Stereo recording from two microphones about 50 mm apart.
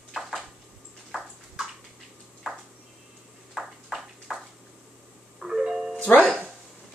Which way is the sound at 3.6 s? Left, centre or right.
Centre.